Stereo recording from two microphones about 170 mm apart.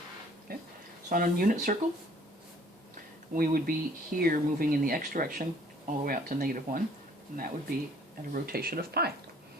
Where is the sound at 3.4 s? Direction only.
55° right (ahead or behind).